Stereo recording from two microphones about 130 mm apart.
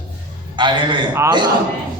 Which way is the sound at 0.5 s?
35° right (ahead or behind).